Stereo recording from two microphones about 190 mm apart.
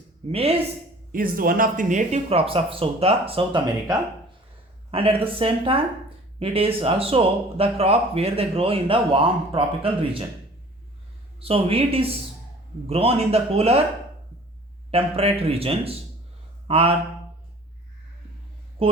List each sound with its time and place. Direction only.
0.3 s speech: 30° right (ahead or behind)
1.1 s speech: 50° right (ahead or behind); by 10.2 s 30° right (ahead or behind)
11.3 s speech: 30° right (ahead or behind)
14.8 s speech: 30° right (ahead or behind)
18.8 s speech: 30° right (ahead or behind)